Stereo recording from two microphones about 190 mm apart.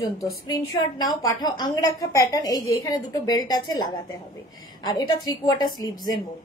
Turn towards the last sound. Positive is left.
turn(degrees=20)  # may be behind; listen again after turning